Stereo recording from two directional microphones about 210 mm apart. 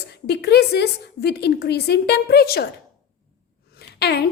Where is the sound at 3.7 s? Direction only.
50° left (ahead or behind).